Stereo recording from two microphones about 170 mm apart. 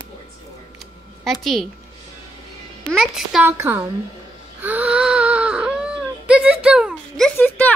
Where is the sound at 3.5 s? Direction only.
15° right (ahead or behind).